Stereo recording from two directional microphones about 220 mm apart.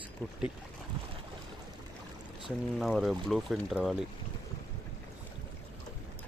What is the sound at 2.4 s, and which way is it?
Speech, centre (ahead or behind).